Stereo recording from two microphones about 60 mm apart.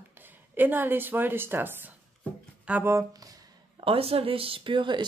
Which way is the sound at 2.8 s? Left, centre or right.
Right.